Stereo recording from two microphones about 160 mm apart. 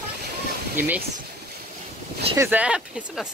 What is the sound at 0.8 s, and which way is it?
Speech, 10° right (ahead or behind).